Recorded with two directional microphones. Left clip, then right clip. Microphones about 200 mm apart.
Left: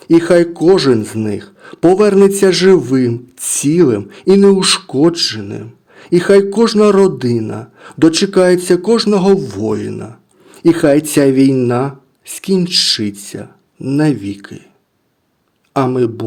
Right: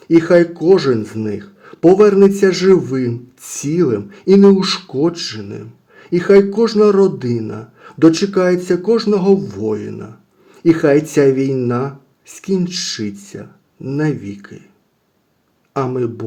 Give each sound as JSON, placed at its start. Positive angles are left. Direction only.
{"t": 0.0, "sound": "speech", "side_deg": 35}
{"t": 15.7, "sound": "speech", "side_deg": 35}